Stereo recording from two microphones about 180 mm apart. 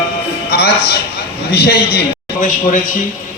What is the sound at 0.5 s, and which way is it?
A man's voice, 65° left (ahead or behind).